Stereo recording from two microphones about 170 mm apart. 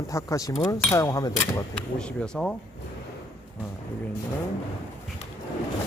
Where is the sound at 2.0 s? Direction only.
5° left (ahead or behind).